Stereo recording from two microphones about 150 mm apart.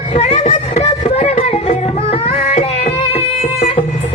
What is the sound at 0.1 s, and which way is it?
Music, 50° left (ahead or behind).